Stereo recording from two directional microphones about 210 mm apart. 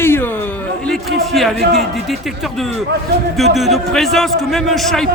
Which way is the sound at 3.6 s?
Centre (ahead or behind).